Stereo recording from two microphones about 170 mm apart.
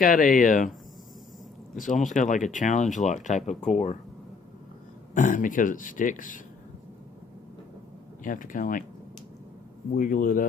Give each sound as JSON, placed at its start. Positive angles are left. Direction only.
{"t": 0.0, "sound": "speech", "side_deg": 55}
{"t": 1.7, "sound": "speech", "side_deg": 50}
{"t": 5.1, "sound": "speech", "side_deg": 50}
{"t": 8.2, "sound": "speech", "side_deg": 50}
{"t": 9.9, "sound": "speech", "side_deg": 55}